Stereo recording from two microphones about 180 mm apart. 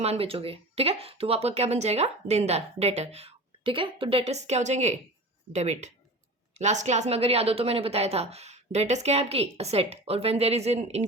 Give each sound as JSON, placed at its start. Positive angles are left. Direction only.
{"t": 0.0, "sound": "speech", "side_deg": -35}